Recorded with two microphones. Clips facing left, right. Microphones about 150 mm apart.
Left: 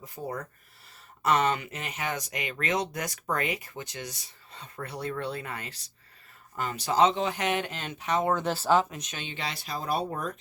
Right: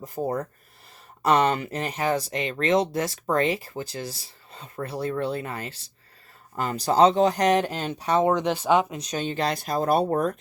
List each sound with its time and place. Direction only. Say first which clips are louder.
0.0 s speech: right 8 dB; 35° right (ahead or behind)
8.2 s speech: right 5 dB; 20° right (ahead or behind)
9.0 s speech: right 10 dB; 40° right (ahead or behind)